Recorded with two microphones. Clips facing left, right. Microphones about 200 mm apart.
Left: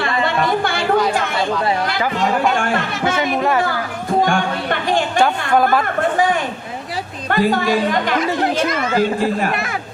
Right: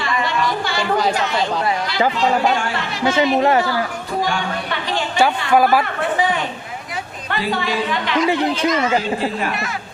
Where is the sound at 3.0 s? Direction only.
25° right (ahead or behind).